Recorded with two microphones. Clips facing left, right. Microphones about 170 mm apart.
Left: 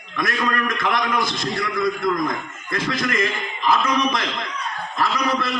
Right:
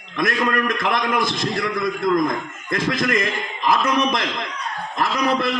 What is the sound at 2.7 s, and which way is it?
A man's voice, 25° right (ahead or behind).